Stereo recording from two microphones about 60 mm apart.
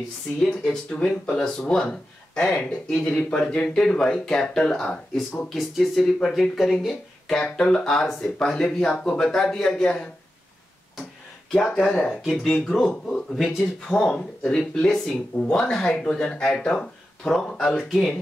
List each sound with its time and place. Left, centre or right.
0.4 s speech: centre
6.5 s speech: centre
11.5 s speech: centre
13.4 s speech: centre
13.8 s speech: centre